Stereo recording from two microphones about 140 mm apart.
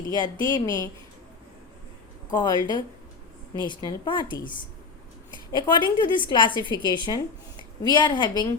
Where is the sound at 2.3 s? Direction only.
30° left (ahead or behind).